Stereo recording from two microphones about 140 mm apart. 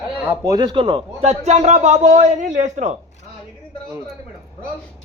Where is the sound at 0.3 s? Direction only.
25° right (ahead or behind); by 3.0 s 60° right (ahead or behind).